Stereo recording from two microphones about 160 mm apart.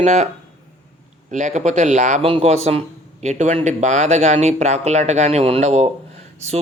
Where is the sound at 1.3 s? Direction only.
50° right (ahead or behind).